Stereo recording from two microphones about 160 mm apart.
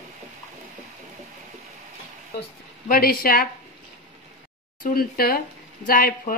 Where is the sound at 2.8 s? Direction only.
70° left (ahead or behind).